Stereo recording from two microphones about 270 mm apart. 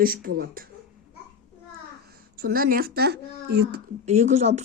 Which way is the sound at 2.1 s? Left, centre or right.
Right.